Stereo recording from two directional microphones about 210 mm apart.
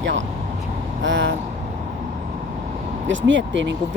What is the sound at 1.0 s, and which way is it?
Speech, 60° right (ahead or behind).